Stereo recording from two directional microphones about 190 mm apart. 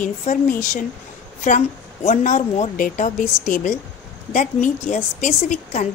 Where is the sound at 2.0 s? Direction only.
40° left (ahead or behind).